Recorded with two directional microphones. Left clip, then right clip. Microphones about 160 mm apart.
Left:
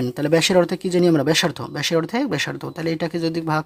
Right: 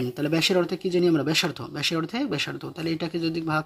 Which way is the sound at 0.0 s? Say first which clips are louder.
Left 6 dB; 35° left (ahead or behind).